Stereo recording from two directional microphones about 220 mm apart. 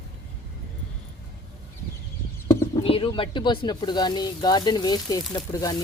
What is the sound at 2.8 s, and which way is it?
Speech, 25° left (ahead or behind).